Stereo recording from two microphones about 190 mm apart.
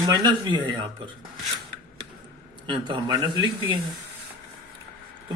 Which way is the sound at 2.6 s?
25° right (ahead or behind).